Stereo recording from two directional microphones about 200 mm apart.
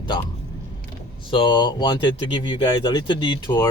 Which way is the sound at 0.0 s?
25° left (ahead or behind).